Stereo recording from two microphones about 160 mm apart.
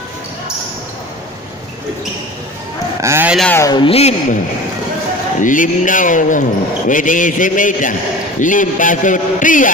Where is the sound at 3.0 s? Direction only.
15° right (ahead or behind).